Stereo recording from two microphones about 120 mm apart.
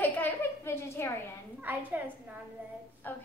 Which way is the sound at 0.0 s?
15° left (ahead or behind).